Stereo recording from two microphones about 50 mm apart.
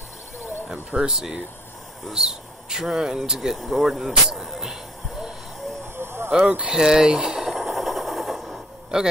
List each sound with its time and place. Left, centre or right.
0.9 s speech: centre
3.3 s speech: centre
5.9 s a sound: right
6.3 s speech: right
7.5 s a sound: centre
8.9 s speech: centre